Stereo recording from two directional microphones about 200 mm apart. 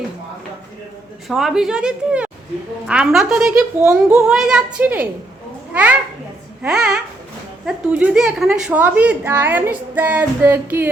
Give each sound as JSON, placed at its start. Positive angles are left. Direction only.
{"t": 1.3, "sound": "a woman's voice", "side_deg": 0}